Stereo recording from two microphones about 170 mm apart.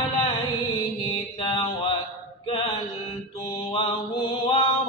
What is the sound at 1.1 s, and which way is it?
Mantra, 30° left (ahead or behind).